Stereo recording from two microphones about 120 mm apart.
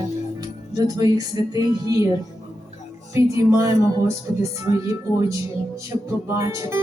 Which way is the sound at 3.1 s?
25° right (ahead or behind).